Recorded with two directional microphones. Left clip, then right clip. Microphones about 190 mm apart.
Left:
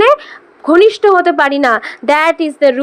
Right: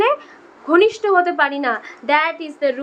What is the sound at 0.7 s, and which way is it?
A woman's voice, 45° left (ahead or behind).